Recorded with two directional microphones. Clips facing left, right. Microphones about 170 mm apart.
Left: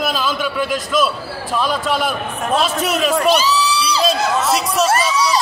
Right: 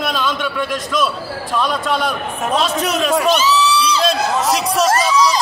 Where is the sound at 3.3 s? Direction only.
35° left (ahead or behind).